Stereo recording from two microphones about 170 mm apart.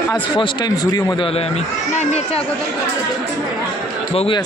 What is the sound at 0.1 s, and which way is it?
Speech, 25° left (ahead or behind).